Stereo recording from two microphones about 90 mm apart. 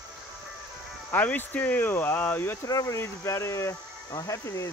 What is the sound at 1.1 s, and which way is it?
Speech, 20° left (ahead or behind).